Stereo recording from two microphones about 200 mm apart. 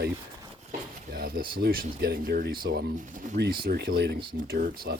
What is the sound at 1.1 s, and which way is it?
Speech, 50° right (ahead or behind).